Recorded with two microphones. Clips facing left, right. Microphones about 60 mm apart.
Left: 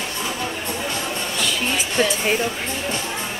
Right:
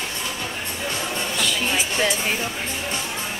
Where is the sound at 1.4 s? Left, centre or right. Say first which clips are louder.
Even; centre.